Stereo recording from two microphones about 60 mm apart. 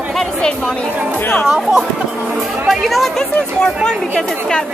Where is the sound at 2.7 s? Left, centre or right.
Centre.